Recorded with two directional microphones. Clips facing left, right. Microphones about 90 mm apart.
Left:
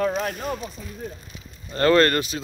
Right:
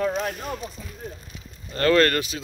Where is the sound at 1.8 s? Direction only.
30° left (ahead or behind).